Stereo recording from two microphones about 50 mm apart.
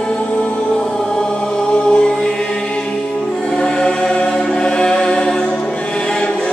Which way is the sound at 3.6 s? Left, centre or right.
Centre.